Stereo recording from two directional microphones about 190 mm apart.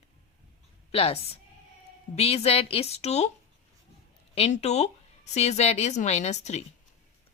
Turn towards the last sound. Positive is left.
turn(degrees=35)  # may be behind; listen again after turning